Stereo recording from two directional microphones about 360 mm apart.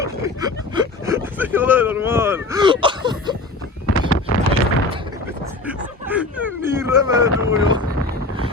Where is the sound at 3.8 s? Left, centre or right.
Left.